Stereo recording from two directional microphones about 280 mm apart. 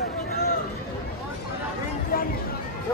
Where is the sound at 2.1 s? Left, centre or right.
Left.